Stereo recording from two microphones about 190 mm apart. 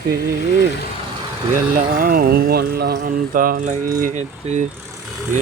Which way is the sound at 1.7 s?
45° right (ahead or behind).